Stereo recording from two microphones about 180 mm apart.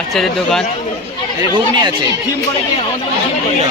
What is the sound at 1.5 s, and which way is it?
Speech, 25° right (ahead or behind).